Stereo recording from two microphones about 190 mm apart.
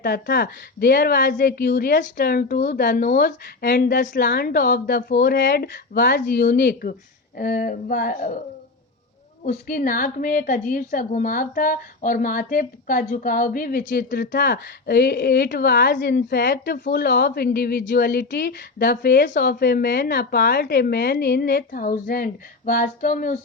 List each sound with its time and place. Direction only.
0.0 s a woman's voice: 55° left (ahead or behind)
9.5 s a woman's voice: 45° left (ahead or behind)